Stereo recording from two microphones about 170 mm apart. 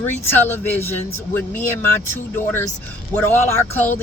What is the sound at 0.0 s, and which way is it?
Speech, 15° left (ahead or behind).